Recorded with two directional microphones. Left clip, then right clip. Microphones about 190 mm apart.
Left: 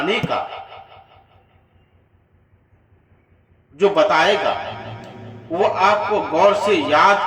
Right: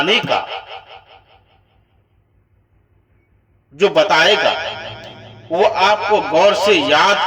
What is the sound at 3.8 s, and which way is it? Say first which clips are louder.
Speech: right 2 dB; 50° right (ahead or behind).